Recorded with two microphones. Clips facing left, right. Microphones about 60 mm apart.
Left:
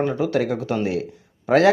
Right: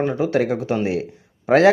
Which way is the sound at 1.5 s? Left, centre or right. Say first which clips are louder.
Right 2 dB; right.